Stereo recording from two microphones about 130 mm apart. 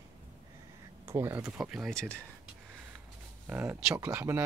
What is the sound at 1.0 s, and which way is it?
Speech, 20° right (ahead or behind).